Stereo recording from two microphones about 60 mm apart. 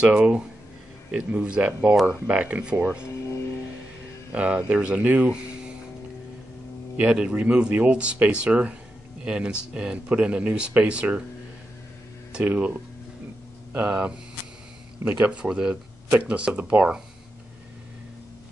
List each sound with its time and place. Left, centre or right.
0.1 s speech: right
4.3 s speech: right
7.0 s speech: right
12.4 s speech: right
13.7 s speech: right
15.3 s speech: centre